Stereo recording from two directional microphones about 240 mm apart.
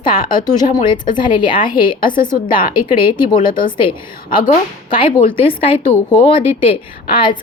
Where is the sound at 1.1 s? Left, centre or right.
Centre.